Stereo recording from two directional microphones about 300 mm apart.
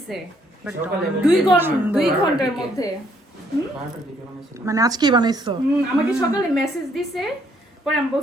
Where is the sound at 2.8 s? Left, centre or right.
Centre.